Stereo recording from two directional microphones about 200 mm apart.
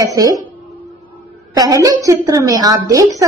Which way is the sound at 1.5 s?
20° right (ahead or behind).